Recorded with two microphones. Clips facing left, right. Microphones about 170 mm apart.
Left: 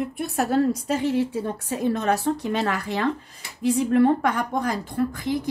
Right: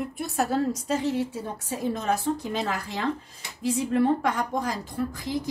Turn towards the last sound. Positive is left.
turn(degrees=60)  # may be behind; listen again after turning